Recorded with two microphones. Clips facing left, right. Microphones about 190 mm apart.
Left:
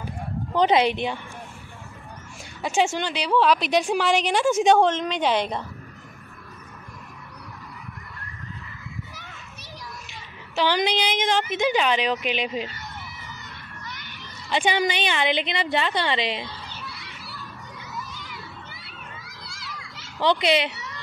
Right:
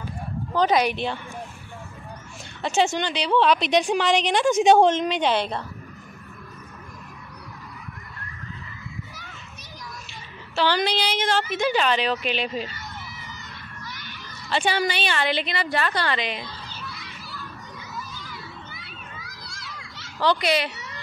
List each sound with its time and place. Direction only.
0.6 s a woman's voice: 25° left (ahead or behind)
2.6 s a woman's voice: 10° left (ahead or behind)
4.7 s a woman's voice: 10° right (ahead or behind)
5.2 s a woman's voice: 15° left (ahead or behind)
10.5 s a woman's voice: 15° left (ahead or behind)
14.5 s a woman's voice: 15° left (ahead or behind)
16.6 s honk: 65° left (ahead or behind)
20.2 s a woman's voice: 20° left (ahead or behind)